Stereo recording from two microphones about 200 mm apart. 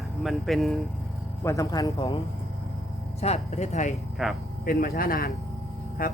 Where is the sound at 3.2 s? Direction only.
35° left (ahead or behind).